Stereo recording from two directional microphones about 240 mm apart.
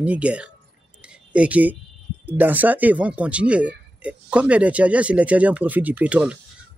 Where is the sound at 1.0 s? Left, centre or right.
Centre.